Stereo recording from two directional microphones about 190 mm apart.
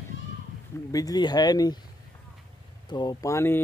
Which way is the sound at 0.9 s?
20° left (ahead or behind).